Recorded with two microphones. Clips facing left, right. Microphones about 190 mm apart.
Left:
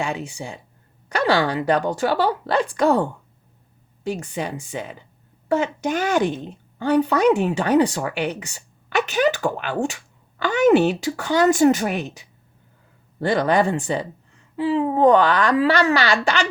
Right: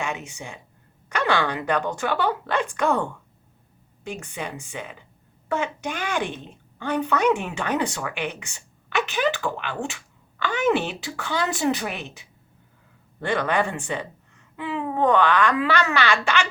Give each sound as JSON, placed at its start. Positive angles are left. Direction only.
{"t": 0.0, "sound": "a woman's voice", "side_deg": 35}